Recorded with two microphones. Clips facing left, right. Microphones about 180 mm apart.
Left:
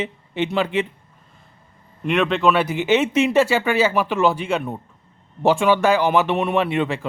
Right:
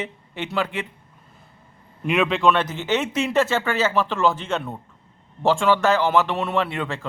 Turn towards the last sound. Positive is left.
turn(degrees=15)  # may be behind; listen again after turning